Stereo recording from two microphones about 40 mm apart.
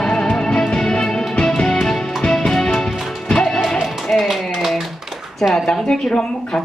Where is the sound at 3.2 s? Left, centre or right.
Centre.